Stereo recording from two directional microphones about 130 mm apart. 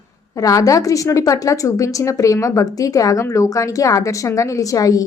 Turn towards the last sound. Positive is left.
turn(degrees=25)  # may be behind; listen again after turning